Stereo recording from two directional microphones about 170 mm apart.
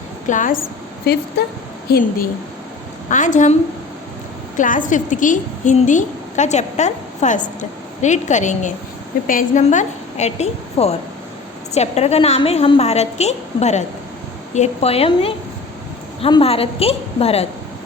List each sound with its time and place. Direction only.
0.3 s a woman's voice: 50° left (ahead or behind)
1.1 s a woman's voice: 70° left (ahead or behind)
3.1 s a woman's voice: 45° left (ahead or behind)
4.5 s a woman's voice: 50° left (ahead or behind)